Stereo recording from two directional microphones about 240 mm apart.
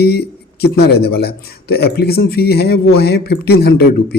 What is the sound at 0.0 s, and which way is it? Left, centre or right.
Speech, left.